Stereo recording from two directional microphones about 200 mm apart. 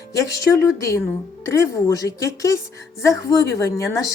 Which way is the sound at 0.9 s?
15° left (ahead or behind).